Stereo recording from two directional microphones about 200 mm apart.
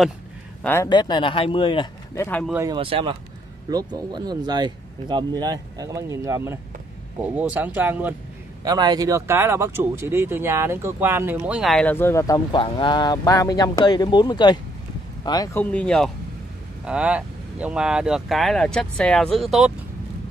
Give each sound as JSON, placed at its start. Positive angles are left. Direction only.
{"t": 0.7, "sound": "speech", "side_deg": 15}
{"t": 2.1, "sound": "speech", "side_deg": 10}
{"t": 2.6, "sound": "speech", "side_deg": -25}
{"t": 8.6, "sound": "speech", "side_deg": -20}
{"t": 15.6, "sound": "speech", "side_deg": 5}